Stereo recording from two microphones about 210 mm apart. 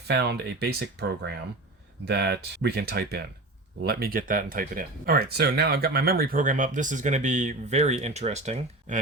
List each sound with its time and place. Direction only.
0.1 s speech: 50° right (ahead or behind); by 9.0 s 30° right (ahead or behind)